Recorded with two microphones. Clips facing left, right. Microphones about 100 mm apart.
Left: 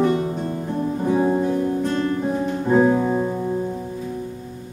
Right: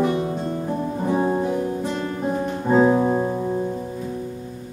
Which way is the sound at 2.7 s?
25° right (ahead or behind).